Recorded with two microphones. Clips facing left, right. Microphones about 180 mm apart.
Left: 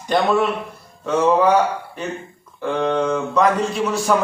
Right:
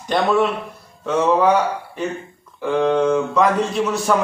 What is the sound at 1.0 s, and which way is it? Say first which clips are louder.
Speech: even; centre (ahead or behind).